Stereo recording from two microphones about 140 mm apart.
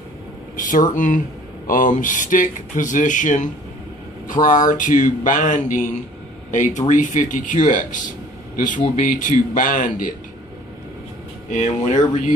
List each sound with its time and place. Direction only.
0.6 s speech: 75° left (ahead or behind)
11.5 s speech: 60° left (ahead or behind)